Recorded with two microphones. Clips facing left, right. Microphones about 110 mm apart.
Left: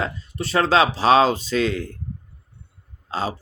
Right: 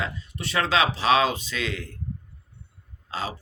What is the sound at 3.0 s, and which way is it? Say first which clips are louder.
Throat clearing: left 5 dB; 35° left (ahead or behind).